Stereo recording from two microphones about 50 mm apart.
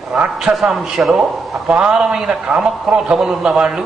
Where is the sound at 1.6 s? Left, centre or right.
Right.